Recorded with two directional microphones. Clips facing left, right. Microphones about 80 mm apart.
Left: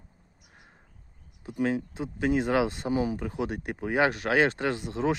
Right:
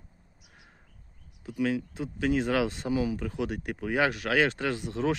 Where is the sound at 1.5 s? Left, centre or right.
Left.